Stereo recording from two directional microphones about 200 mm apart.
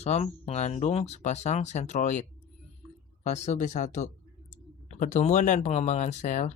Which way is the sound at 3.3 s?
35° left (ahead or behind).